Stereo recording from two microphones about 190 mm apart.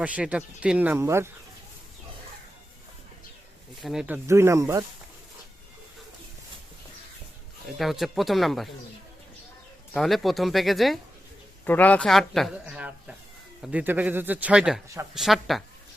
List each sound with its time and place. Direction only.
0.0 s speech: 5° right (ahead or behind)
3.8 s speech: centre (ahead or behind)
7.8 s speech: centre (ahead or behind)
9.9 s speech: centre (ahead or behind)